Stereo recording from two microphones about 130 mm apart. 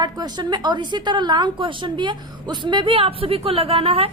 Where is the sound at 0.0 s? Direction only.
35° right (ahead or behind).